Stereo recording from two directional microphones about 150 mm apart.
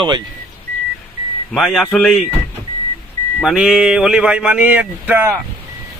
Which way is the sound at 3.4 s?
5° right (ahead or behind).